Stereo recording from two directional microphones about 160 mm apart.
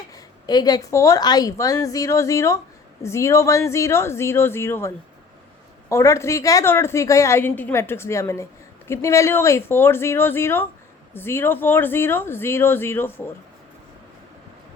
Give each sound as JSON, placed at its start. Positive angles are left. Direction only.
{"t": 0.1, "sound": "a woman's voice", "side_deg": 25}
{"t": 5.9, "sound": "a woman's voice", "side_deg": 20}